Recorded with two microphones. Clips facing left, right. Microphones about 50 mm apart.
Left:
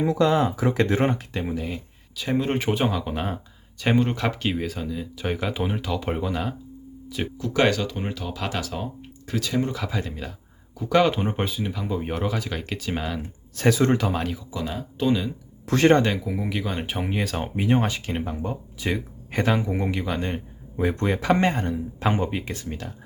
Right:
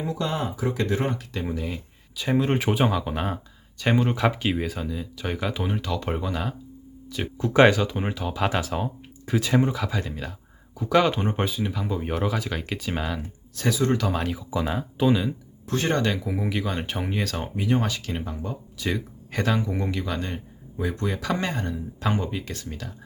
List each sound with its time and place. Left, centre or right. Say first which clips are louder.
0.1 s speech: left 7 dB; left
1.2 s speech: left 2 dB; centre
1.5 s speech: left 1 dB; centre
7.3 s speech: right 5 dB; right
7.7 s speech: right 2 dB; centre
9.6 s speech: right 1 dB; centre
13.6 s speech: left 4 dB; left
14.1 s speech: even; centre
14.6 s speech: right 2 dB; centre
15.6 s speech: left 8 dB; left
16.0 s speech: even; centre
17.4 s speech: left 3 dB; left